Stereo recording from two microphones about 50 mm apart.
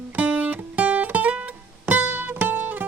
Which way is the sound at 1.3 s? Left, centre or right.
Right.